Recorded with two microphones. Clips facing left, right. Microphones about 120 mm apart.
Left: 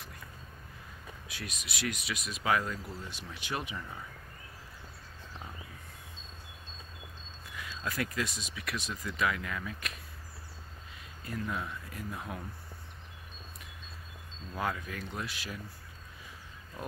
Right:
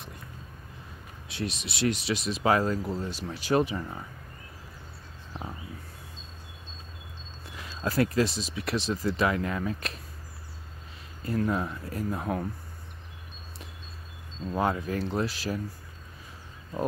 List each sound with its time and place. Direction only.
1.3 s speech: 25° right (ahead or behind)
7.5 s speech: 35° right (ahead or behind)
11.3 s speech: 40° right (ahead or behind)
14.5 s speech: 30° right (ahead or behind)